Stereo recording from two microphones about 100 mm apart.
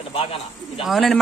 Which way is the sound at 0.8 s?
Centre (ahead or behind).